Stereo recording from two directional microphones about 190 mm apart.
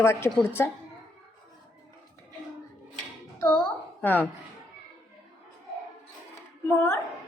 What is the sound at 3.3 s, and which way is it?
Child singing, 20° left (ahead or behind).